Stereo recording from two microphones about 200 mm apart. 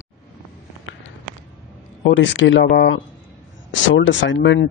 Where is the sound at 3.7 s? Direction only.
65° left (ahead or behind).